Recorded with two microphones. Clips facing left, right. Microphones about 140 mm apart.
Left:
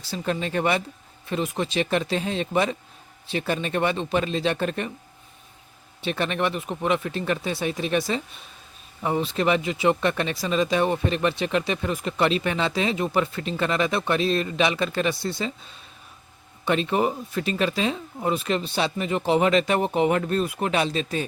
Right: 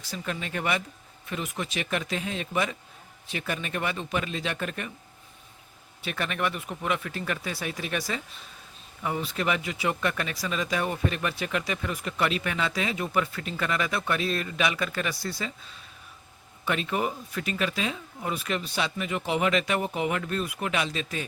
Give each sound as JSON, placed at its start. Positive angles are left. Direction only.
{"t": 0.0, "sound": "speech", "side_deg": 30}
{"t": 6.0, "sound": "speech", "side_deg": 25}
{"t": 16.6, "sound": "speech", "side_deg": 30}